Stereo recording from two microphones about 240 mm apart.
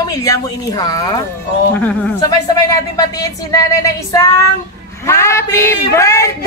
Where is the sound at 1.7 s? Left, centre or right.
Centre.